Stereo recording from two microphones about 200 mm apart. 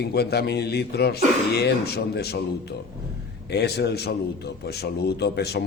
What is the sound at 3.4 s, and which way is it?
Speech, 55° left (ahead or behind).